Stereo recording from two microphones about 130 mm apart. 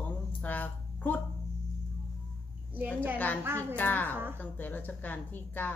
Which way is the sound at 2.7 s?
15° right (ahead or behind).